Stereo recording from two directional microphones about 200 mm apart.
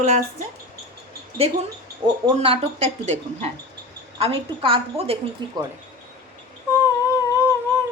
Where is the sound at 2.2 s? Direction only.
25° right (ahead or behind).